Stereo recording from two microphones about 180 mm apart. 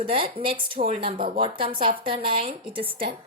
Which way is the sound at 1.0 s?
30° right (ahead or behind).